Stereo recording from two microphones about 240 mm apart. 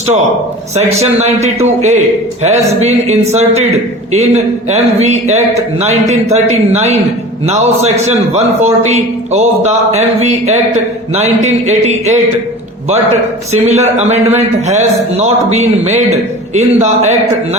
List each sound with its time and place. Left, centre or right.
0.8 s a man's voice: right
13.5 s a man's voice: right